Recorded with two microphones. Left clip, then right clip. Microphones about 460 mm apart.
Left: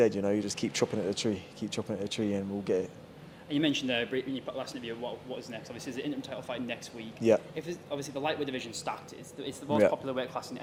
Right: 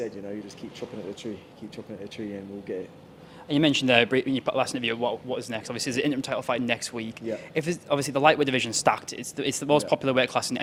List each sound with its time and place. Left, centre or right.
0.0 s speech: left
1.7 s speech: left
3.5 s a man's voice: right
9.4 s a man's voice: right